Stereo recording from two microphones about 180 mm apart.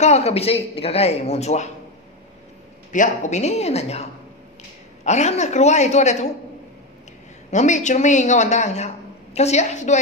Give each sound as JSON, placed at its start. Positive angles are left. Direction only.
{"t": 0.0, "sound": "a man's voice", "side_deg": 35}
{"t": 2.9, "sound": "a man's voice", "side_deg": 40}
{"t": 7.5, "sound": "a man's voice", "side_deg": 40}